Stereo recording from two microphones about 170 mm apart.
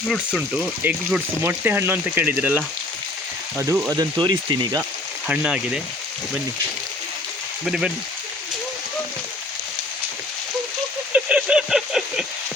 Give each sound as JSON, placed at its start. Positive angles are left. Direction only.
{"t": 0.3, "sound": "speech", "side_deg": -5}
{"t": 3.9, "sound": "speech", "side_deg": -25}
{"t": 5.3, "sound": "speech", "side_deg": -5}
{"t": 7.6, "sound": "speech", "side_deg": -5}
{"t": 11.1, "sound": "a sound", "side_deg": -5}